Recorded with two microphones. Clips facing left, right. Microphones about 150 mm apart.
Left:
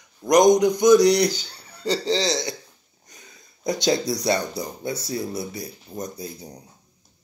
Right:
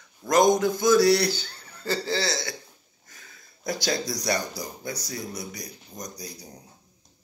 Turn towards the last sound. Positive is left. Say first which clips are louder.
# left 6 dB
turn(degrees=25)  # may be behind; listen again after turning